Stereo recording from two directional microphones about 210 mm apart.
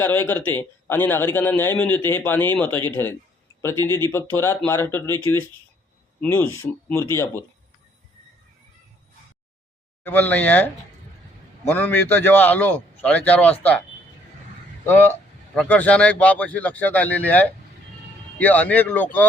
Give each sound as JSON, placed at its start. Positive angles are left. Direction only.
{"t": 0.0, "sound": "a man's voice", "side_deg": 10}
{"t": 10.0, "sound": "a man's voice", "side_deg": 10}
{"t": 11.7, "sound": "a man's voice", "side_deg": 10}
{"t": 14.8, "sound": "a man's voice", "side_deg": 10}